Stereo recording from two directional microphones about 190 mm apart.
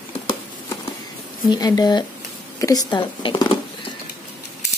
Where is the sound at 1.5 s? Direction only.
20° left (ahead or behind).